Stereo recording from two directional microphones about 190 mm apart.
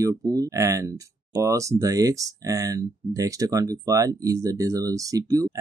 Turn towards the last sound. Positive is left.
turn(degrees=-20)  # may be behind; listen again after turning